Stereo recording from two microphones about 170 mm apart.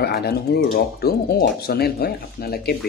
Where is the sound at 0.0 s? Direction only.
70° left (ahead or behind).